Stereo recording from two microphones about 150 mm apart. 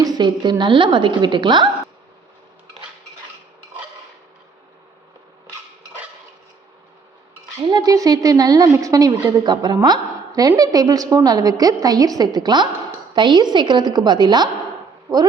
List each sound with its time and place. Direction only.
0.0 s a woman's voice: 30° right (ahead or behind)
7.6 s a woman's voice: 30° right (ahead or behind)